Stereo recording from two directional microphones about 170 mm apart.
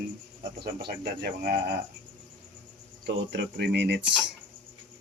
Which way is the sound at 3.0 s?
80° right.